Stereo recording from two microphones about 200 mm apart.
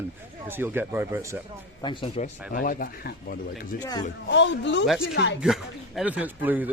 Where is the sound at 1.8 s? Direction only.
25° left (ahead or behind).